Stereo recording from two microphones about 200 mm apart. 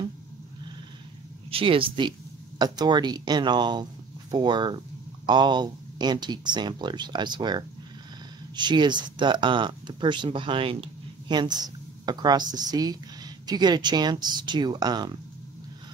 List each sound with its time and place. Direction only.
1.5 s speech: 25° right (ahead or behind)